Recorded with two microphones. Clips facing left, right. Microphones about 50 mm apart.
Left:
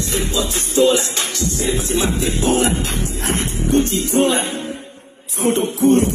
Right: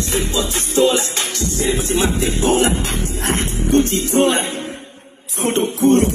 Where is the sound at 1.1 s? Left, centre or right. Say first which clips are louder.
Even; left.